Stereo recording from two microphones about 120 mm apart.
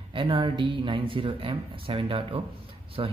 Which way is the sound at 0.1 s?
45° right (ahead or behind).